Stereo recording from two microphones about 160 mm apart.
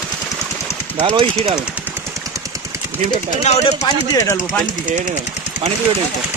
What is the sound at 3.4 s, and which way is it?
Speech, 40° left (ahead or behind).